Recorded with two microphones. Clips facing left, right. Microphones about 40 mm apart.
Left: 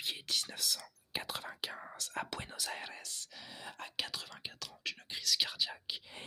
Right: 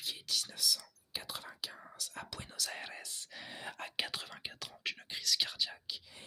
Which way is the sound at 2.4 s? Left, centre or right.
Centre.